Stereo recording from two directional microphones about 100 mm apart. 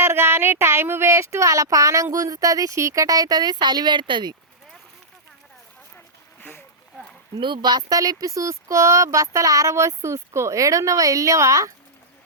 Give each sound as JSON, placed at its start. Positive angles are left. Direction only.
{"t": 0.0, "sound": "speech", "side_deg": -25}
{"t": 7.3, "sound": "speech", "side_deg": -50}